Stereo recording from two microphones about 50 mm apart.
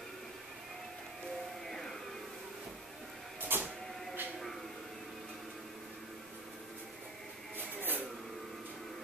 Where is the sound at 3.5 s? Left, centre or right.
Right.